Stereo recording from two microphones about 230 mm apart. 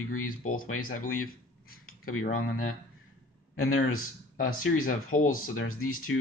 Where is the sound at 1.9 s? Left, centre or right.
Left.